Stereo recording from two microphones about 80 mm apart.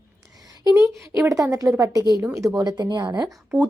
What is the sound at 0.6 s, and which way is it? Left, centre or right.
Speech, left.